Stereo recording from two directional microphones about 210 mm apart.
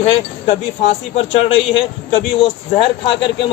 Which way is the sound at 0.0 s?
30° left (ahead or behind).